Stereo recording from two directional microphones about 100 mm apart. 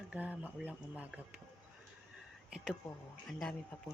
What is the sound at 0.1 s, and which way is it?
Speech, 15° right (ahead or behind).